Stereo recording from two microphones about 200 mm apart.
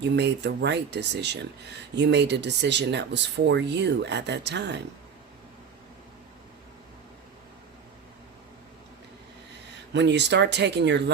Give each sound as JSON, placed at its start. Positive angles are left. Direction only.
{"t": 0.0, "sound": "speech", "side_deg": -60}
{"t": 9.9, "sound": "speech", "side_deg": -60}